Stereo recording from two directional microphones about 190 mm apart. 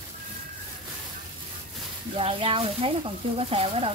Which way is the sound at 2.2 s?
30° right (ahead or behind).